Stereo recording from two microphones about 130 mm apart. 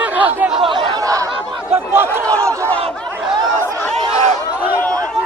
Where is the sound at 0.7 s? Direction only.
35° right (ahead or behind).